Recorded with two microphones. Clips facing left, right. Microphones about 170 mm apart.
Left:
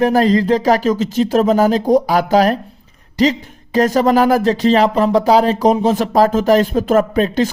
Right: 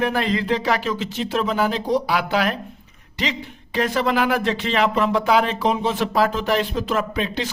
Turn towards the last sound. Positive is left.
turn(degrees=45)  # may be behind; listen again after turning